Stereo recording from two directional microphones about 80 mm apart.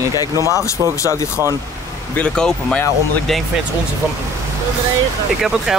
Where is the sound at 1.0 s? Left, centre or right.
Left.